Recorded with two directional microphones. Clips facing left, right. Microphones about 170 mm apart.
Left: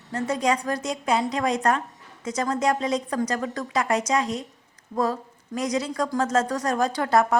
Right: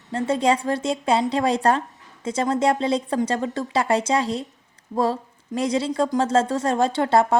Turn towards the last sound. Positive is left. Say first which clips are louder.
# right 3 dB
turn(degrees=-30)  # may be behind; listen again after turning